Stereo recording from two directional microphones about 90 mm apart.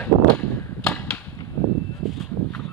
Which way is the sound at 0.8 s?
10° left (ahead or behind).